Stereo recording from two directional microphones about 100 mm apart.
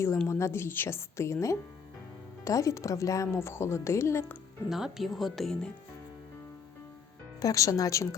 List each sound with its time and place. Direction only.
0.3 s a woman's voice: 30° left (ahead or behind)
4.7 s speech: 5° right (ahead or behind)
7.3 s speech: 35° left (ahead or behind)